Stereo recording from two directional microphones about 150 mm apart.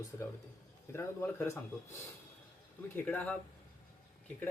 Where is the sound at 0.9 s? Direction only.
15° left (ahead or behind).